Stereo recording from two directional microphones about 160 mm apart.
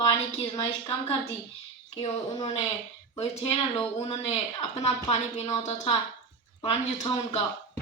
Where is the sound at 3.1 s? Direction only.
40° left (ahead or behind).